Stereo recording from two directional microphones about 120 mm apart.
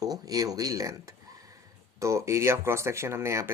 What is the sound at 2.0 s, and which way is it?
Speech, 25° right (ahead or behind).